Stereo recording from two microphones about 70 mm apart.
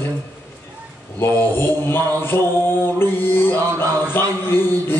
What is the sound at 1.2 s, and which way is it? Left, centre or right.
Mantra, left.